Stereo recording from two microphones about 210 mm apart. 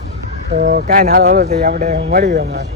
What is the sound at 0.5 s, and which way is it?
Speech, 45° right (ahead or behind).